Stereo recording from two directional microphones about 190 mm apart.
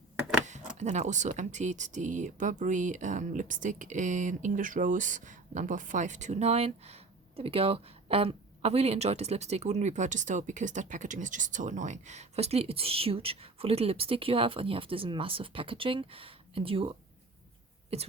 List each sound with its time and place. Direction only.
0.4 s speech: 40° right (ahead or behind)
17.9 s speech: 30° right (ahead or behind)